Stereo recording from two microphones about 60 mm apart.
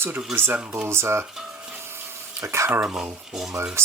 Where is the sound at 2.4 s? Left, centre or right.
Right.